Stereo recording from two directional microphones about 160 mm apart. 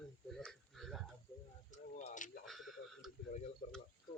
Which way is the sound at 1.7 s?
50° left (ahead or behind).